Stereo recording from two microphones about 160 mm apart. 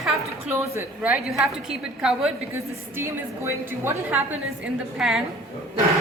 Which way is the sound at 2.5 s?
15° right (ahead or behind).